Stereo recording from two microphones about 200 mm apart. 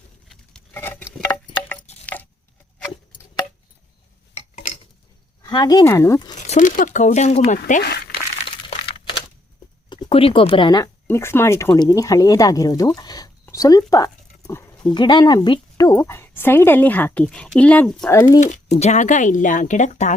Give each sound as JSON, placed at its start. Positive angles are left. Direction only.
{"t": 0.3, "sound": "patter", "side_deg": 5}
{"t": 1.7, "sound": "a sound", "side_deg": 10}
{"t": 4.4, "sound": "a sound", "side_deg": 30}
{"t": 5.4, "sound": "speech", "side_deg": 20}
{"t": 6.3, "sound": "speech", "side_deg": 35}
{"t": 7.8, "sound": "speech", "side_deg": 55}
{"t": 9.9, "sound": "a woman's voice", "side_deg": 25}
{"t": 13.0, "sound": "a sound", "side_deg": 20}
{"t": 14.9, "sound": "a woman's voice", "side_deg": 20}
{"t": 18.1, "sound": "a woman's voice", "side_deg": 15}
{"t": 18.3, "sound": "speech", "side_deg": 35}